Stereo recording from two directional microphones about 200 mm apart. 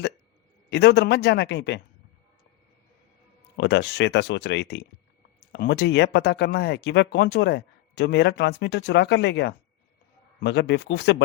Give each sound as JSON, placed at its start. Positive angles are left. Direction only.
{"t": 0.7, "sound": "speech", "side_deg": 55}
{"t": 3.6, "sound": "speech", "side_deg": 60}